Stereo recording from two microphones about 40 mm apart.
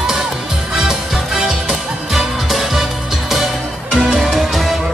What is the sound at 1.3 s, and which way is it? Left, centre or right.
Music, centre.